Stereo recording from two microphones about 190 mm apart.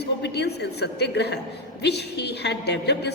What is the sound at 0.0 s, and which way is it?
A woman's voice, 60° left (ahead or behind).